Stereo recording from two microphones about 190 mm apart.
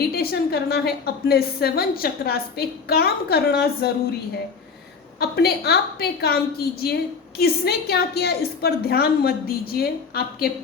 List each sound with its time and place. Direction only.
0.1 s a woman's voice: 55° left (ahead or behind)
5.2 s a woman's voice: 60° left (ahead or behind)